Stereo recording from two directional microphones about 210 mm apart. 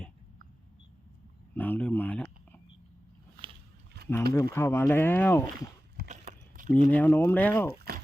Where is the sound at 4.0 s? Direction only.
50° right (ahead or behind).